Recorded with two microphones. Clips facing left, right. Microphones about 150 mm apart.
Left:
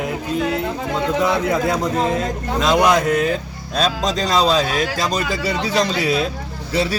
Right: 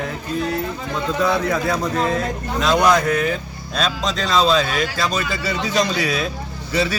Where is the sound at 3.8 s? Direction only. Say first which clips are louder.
Left 3 dB; 40° left (ahead or behind).